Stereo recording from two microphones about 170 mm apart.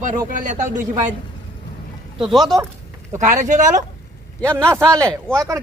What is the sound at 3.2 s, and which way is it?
Speech, 50° right (ahead or behind).